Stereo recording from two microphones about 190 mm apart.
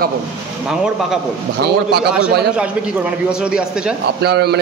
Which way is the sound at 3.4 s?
5° right (ahead or behind).